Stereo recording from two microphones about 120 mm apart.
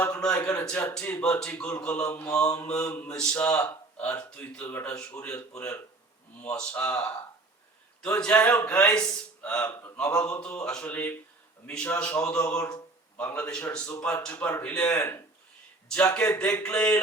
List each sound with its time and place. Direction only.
0.0 s a man's voice: 10° left (ahead or behind)
2.8 s a man's voice: 20° left (ahead or behind)
3.1 s speech: 10° left (ahead or behind)
8.0 s speech: 15° left (ahead or behind)
9.6 s a man's voice: 25° left (ahead or behind)
10.0 s speech: 5° left (ahead or behind)